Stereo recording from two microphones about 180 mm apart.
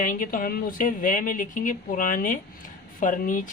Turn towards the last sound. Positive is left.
turn(degrees=45)  # may be behind; listen again after turning